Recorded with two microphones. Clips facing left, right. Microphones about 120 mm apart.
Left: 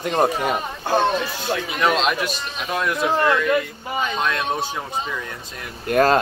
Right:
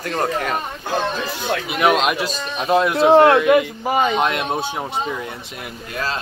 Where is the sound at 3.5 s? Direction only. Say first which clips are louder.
Right 6 dB; 85° right.